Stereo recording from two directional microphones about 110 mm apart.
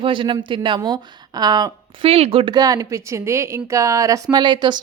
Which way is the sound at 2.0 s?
60° right (ahead or behind).